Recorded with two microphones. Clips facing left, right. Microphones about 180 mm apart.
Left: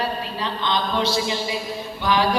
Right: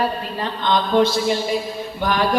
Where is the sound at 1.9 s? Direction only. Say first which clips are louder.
Left 1 dB; 50° right (ahead or behind).